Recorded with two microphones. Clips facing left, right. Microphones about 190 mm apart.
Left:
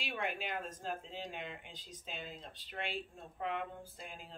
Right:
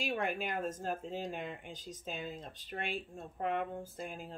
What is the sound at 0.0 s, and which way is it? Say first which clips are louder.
Speech: right 5 dB; 45° right (ahead or behind).